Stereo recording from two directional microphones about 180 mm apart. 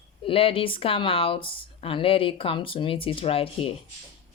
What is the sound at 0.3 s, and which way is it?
A woman's voice, 30° left (ahead or behind).